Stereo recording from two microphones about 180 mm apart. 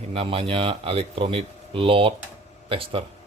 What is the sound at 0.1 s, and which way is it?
Speech, 30° right (ahead or behind).